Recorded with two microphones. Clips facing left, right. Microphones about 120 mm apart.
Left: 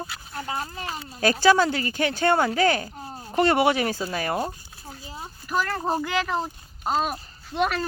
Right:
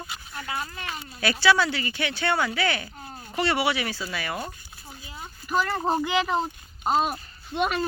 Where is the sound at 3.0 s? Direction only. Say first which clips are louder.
Left 6 dB; 35° left (ahead or behind).